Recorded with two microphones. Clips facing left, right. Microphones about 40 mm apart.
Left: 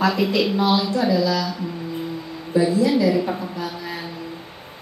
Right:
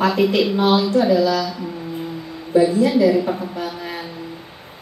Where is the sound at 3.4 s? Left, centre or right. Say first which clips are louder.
Right 2 dB; right.